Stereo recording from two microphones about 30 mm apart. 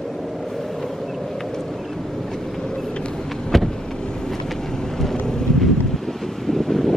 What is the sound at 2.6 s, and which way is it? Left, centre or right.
Vehicle, centre.